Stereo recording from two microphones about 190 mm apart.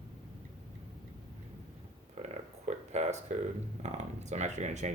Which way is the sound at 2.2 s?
35° right (ahead or behind).